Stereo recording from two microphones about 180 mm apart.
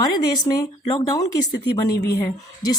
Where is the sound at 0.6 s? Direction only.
20° left (ahead or behind).